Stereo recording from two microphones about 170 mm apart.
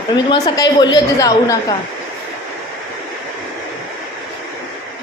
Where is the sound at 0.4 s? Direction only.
20° left (ahead or behind).